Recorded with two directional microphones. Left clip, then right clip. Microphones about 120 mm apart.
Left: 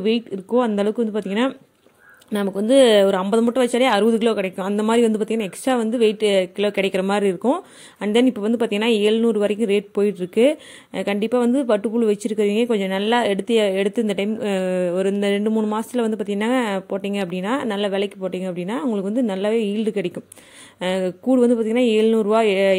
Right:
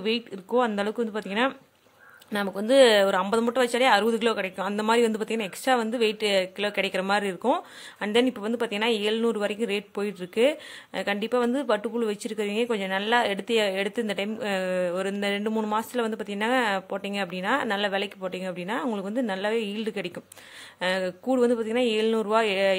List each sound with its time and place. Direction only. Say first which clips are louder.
0.5 s speech: left 5 dB; 20° left (ahead or behind)
2.5 s speech: left 4 dB; 25° left (ahead or behind)
15.4 s speech: left 5 dB; 15° left (ahead or behind)